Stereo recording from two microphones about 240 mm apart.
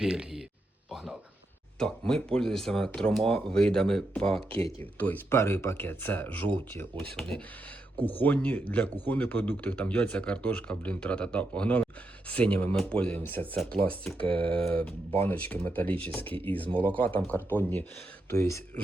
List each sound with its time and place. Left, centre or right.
0.0 s speech: centre
0.9 s a sound: centre
1.8 s speech: centre
14.3 s speech: right
14.6 s speech: centre
16.6 s speech: right
16.9 s speech: centre